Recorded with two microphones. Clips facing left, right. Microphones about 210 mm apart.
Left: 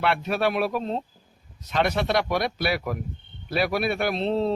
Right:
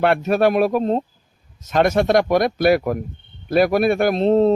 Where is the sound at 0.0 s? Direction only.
45° right (ahead or behind).